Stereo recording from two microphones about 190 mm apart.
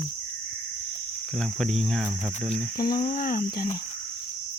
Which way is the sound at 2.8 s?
20° left (ahead or behind).